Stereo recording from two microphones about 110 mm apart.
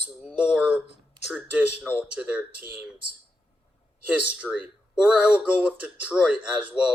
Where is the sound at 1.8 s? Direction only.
10° right (ahead or behind).